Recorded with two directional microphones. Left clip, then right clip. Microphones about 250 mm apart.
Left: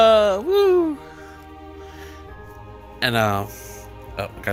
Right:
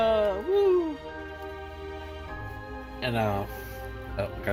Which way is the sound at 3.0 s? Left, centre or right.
Left.